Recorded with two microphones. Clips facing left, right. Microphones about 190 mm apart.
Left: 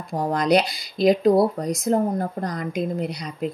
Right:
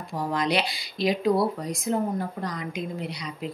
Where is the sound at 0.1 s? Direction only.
45° left (ahead or behind).